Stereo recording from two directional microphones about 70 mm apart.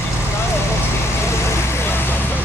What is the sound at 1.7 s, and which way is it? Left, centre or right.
Vehicle, left.